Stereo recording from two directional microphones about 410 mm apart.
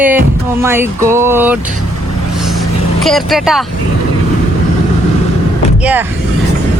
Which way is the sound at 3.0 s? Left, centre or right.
Centre.